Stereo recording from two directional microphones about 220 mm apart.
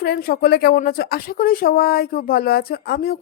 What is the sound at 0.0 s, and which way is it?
Speech, 45° left (ahead or behind).